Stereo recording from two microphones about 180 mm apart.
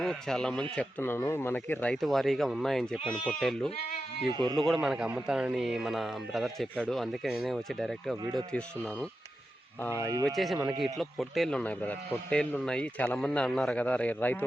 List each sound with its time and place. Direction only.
0.0 s a man's voice: 5° left (ahead or behind)
4.3 s speech: 25° right (ahead or behind)
4.5 s speech: centre (ahead or behind)
8.2 s speech: 25° right (ahead or behind)
8.5 s speech: 5° left (ahead or behind)
10.2 s speech: centre (ahead or behind)